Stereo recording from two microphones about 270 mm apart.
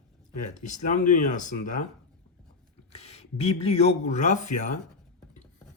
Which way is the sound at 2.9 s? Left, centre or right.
Left.